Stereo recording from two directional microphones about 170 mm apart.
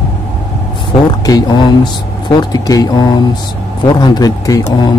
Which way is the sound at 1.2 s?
25° left (ahead or behind).